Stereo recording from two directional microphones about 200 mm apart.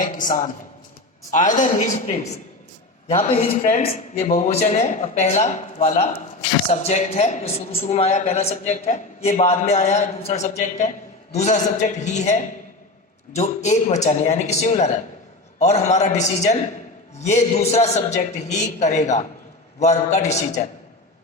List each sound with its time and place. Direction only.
0.0 s a woman's voice: 40° left (ahead or behind)